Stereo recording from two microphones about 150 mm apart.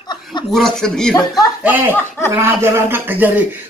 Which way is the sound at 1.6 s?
15° right (ahead or behind).